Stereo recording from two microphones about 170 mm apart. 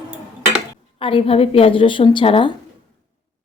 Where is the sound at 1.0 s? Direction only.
30° left (ahead or behind).